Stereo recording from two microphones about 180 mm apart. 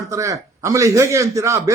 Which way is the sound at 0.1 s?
15° right (ahead or behind).